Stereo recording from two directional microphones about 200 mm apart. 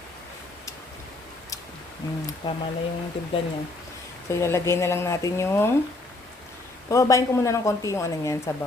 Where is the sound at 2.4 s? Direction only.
20° left (ahead or behind).